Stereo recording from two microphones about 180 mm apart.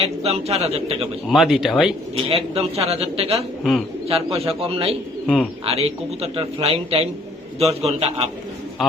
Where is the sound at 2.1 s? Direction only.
35° right (ahead or behind).